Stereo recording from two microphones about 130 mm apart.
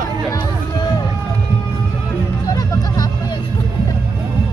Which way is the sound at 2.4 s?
30° left (ahead or behind).